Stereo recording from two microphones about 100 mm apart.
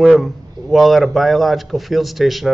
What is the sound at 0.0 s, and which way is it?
A man's voice, centre (ahead or behind).